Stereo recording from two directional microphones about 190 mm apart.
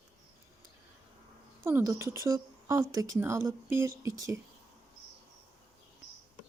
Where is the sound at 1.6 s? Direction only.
15° right (ahead or behind).